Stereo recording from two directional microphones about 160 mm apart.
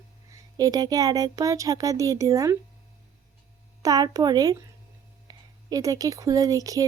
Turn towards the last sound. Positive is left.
turn(degrees=-20)  # may be behind; listen again after turning